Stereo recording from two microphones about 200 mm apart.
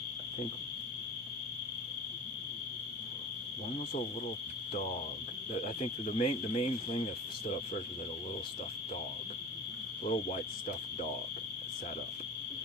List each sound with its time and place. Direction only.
5.5 s speech: 40° left (ahead or behind)
10.0 s speech: 40° left (ahead or behind)